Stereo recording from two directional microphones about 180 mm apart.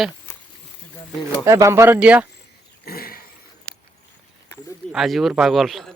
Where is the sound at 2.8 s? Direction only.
55° left (ahead or behind).